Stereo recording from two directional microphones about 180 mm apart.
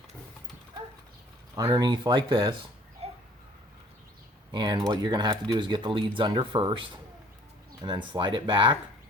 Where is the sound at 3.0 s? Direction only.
35° right (ahead or behind).